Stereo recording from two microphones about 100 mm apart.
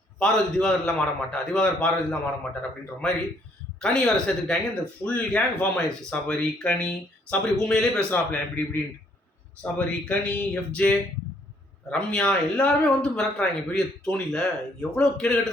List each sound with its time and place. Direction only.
0.2 s speech: 5° left (ahead or behind)
3.8 s speech: 5° left (ahead or behind)
8.1 s a man's voice: 20° left (ahead or behind)